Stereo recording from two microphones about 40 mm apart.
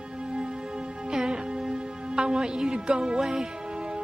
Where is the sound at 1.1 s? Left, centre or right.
Centre.